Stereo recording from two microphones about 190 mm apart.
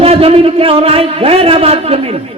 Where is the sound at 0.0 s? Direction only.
30° right (ahead or behind).